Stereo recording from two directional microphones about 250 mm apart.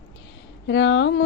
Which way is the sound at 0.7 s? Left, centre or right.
Left.